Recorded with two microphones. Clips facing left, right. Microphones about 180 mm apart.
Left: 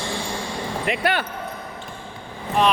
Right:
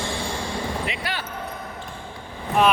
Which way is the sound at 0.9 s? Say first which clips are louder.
Left 8 dB; 55° left (ahead or behind).